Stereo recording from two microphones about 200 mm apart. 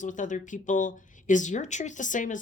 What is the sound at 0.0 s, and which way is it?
Speech, 40° left (ahead or behind).